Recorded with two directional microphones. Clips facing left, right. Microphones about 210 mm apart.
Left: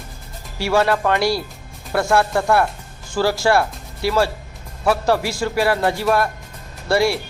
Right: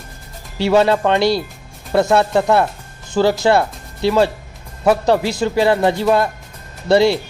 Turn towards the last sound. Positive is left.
turn(degrees=-20)  # may be behind; listen again after turning